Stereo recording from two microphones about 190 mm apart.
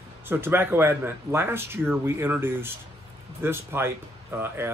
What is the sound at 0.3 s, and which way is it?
Speech, 10° right (ahead or behind).